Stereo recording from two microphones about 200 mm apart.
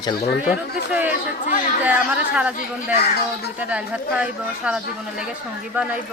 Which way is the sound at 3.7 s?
5° right (ahead or behind).